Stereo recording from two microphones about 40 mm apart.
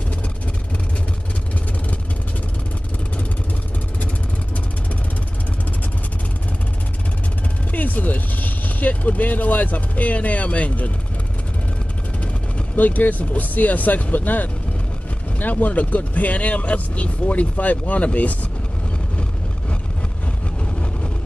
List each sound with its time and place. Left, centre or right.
7.7 s vehicle: left
12.7 s speech: left